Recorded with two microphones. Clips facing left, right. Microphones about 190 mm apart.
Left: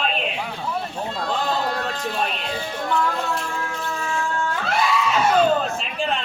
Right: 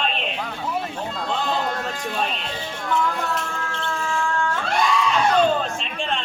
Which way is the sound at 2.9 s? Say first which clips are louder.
Even; 25° right (ahead or behind).